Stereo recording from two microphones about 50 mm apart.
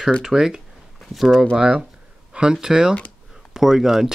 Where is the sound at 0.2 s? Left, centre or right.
Centre.